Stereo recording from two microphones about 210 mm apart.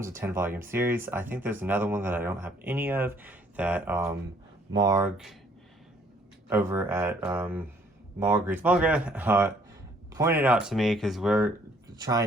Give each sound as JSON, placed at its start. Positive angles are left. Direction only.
{"t": 0.0, "sound": "speech", "side_deg": -10}
{"t": 5.1, "sound": "speech", "side_deg": 0}
{"t": 6.5, "sound": "speech", "side_deg": -10}
{"t": 11.9, "sound": "a sound", "side_deg": -20}